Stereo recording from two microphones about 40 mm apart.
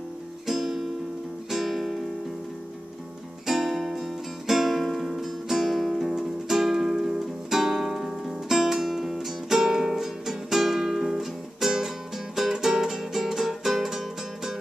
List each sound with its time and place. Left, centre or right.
0.5 s music: centre
3.4 s music: centre